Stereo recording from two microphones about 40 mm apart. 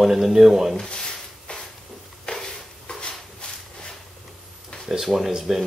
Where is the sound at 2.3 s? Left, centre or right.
Left.